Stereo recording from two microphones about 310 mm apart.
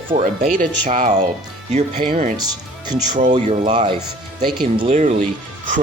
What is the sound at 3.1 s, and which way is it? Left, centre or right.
Speech, right.